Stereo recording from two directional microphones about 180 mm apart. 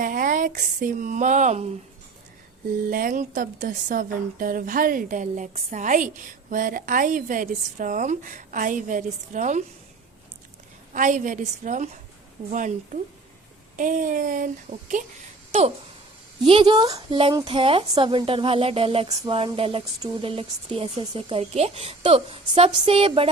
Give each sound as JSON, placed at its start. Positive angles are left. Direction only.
{"t": 0.0, "sound": "speech", "side_deg": -50}
{"t": 2.9, "sound": "speech", "side_deg": -45}
{"t": 10.9, "sound": "speech", "side_deg": -45}
{"t": 16.5, "sound": "a woman's voice", "side_deg": -25}